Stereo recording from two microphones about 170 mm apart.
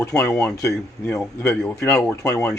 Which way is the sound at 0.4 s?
20° left (ahead or behind).